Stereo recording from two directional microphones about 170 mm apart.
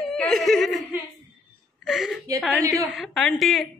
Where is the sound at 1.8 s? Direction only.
Centre (ahead or behind).